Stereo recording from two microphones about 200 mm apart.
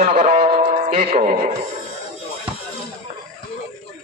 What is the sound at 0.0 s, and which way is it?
Speech, 45° right (ahead or behind).